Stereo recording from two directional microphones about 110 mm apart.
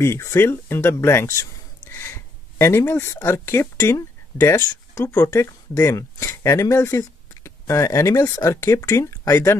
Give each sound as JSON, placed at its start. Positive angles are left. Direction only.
{"t": 0.0, "sound": "speech", "side_deg": 25}
{"t": 5.0, "sound": "speech", "side_deg": 20}